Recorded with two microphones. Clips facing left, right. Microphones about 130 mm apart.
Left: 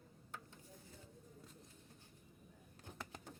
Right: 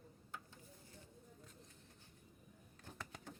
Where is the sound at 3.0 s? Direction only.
30° left (ahead or behind).